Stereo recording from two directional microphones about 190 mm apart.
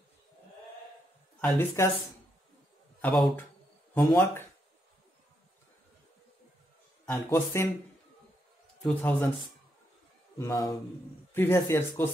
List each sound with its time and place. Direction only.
1.4 s speech: 10° left (ahead or behind)
3.0 s speech: 5° left (ahead or behind)
7.1 s speech: 15° left (ahead or behind)
8.8 s speech: 5° left (ahead or behind)
10.4 s speech: 20° left (ahead or behind)